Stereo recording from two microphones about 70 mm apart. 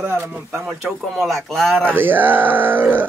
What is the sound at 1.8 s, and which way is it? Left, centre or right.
Speech, right.